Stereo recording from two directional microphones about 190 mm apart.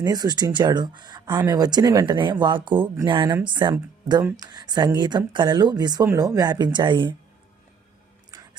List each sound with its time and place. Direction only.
0.0 s speech: 20° right (ahead or behind)
4.2 s speech: 10° right (ahead or behind)
4.5 s speech: 20° right (ahead or behind)